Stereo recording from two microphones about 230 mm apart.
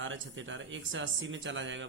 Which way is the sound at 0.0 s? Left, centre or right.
Right.